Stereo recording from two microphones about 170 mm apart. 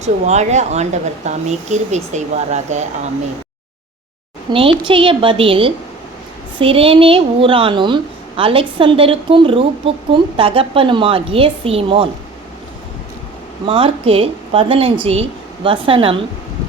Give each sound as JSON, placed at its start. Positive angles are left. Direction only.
{"t": 0.0, "sound": "speech", "side_deg": -40}
{"t": 4.5, "sound": "a woman's voice", "side_deg": -30}
{"t": 13.7, "sound": "a woman's voice", "side_deg": -30}